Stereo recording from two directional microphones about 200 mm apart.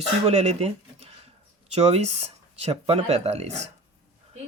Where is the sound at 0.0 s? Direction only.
30° right (ahead or behind).